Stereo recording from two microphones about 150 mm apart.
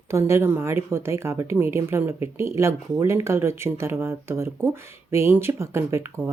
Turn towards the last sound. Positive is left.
turn(degrees=-15)  # may be behind; listen again after turning